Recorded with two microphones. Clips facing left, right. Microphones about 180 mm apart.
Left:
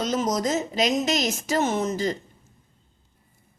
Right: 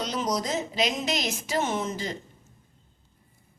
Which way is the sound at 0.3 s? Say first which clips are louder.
Left 4 dB; 45° left (ahead or behind).